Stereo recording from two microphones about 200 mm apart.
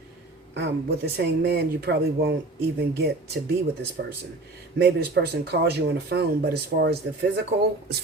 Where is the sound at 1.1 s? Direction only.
55° right (ahead or behind).